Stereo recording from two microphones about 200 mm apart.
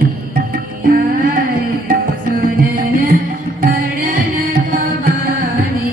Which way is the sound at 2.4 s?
45° right (ahead or behind).